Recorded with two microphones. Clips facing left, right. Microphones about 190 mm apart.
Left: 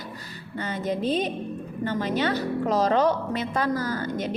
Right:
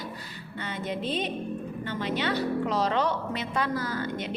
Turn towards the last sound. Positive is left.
turn(degrees=40)  # may be behind; listen again after turning